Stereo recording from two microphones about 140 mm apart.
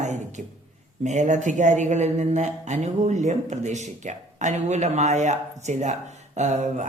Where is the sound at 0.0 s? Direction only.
55° right (ahead or behind).